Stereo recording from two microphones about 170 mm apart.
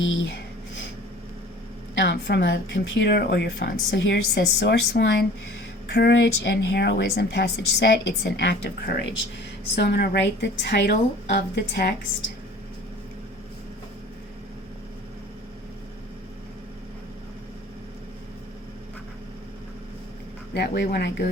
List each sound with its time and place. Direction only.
0.0 s a woman's voice: 90° left
2.2 s a woman's voice: 85° left
20.5 s speech: 75° left (ahead or behind)